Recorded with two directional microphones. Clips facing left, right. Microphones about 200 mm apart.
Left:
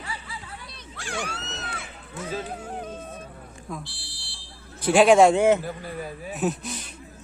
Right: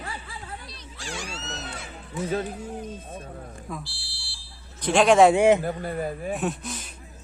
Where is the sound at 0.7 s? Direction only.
55° left (ahead or behind).